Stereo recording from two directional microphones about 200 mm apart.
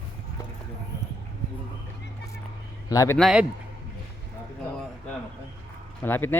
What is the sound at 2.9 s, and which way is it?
Speech, 15° left (ahead or behind).